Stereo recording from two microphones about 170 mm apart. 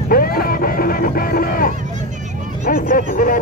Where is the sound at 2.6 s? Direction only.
60° left (ahead or behind).